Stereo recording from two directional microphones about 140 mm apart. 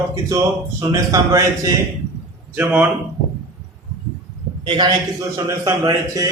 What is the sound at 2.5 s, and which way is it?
Speech, 10° right (ahead or behind).